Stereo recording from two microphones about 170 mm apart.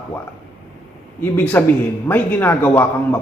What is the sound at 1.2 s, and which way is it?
A man's voice, 10° left (ahead or behind).